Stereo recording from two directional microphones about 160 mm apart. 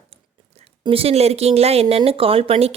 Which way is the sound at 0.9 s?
35° right (ahead or behind).